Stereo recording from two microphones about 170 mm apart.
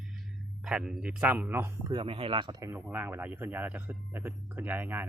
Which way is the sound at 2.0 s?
30° right (ahead or behind).